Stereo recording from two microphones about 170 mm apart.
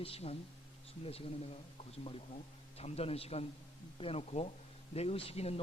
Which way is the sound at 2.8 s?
35° left (ahead or behind).